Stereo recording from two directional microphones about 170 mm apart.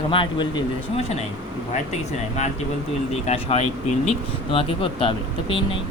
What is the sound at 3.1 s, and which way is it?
Speech, 40° left (ahead or behind).